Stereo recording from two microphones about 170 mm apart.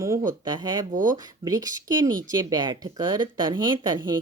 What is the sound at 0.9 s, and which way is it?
Speech, 50° right (ahead or behind).